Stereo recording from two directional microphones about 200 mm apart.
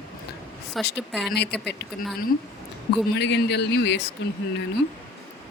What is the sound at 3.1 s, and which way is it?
Speech, 60° left (ahead or behind).